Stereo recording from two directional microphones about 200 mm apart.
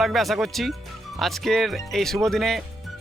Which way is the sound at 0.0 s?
Centre (ahead or behind).